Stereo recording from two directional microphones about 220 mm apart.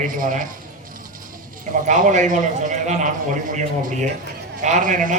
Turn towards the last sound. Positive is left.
turn(degrees=-35)  # may be behind; listen again after turning